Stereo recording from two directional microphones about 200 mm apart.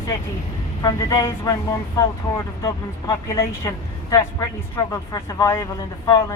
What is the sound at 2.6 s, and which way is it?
Speech, 15° left (ahead or behind).